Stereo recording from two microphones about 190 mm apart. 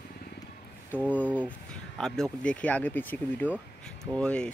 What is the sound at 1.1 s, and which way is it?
Speech, 10° left (ahead or behind).